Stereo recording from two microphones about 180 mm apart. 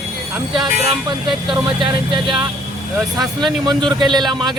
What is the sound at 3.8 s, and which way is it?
Speech, 25° right (ahead or behind).